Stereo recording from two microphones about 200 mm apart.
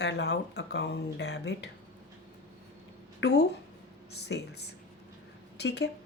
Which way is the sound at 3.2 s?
55° left (ahead or behind).